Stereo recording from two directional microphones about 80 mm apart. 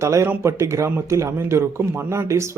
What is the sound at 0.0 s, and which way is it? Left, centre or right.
A man's voice, right.